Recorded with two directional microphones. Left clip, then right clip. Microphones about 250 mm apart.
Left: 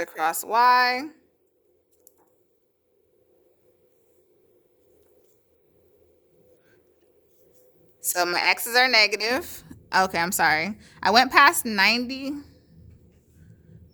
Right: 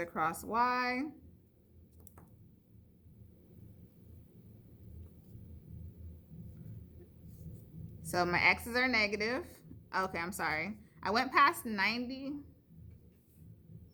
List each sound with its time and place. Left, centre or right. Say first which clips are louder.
0.0 s a woman's voice: left 9 dB; left
8.0 s a woman's voice: left 7 dB; left